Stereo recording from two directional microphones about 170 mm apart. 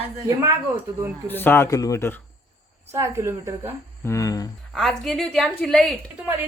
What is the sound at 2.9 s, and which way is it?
Speech, 15° right (ahead or behind).